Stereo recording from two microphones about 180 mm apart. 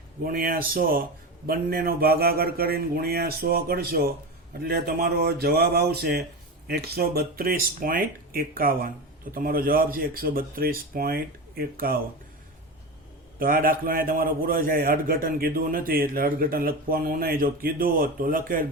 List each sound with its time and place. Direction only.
0.3 s a man's voice: 55° right (ahead or behind)
13.4 s a man's voice: 50° right (ahead or behind)